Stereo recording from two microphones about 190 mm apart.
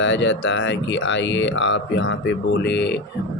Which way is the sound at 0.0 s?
75° left (ahead or behind).